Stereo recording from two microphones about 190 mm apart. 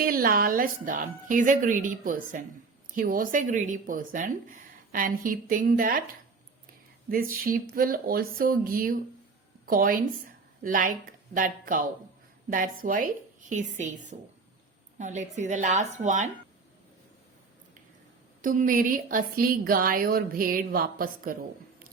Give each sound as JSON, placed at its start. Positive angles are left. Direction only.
{"t": 0.0, "sound": "speech", "side_deg": -50}
{"t": 7.4, "sound": "a woman's voice", "side_deg": -50}
{"t": 18.4, "sound": "speech", "side_deg": -45}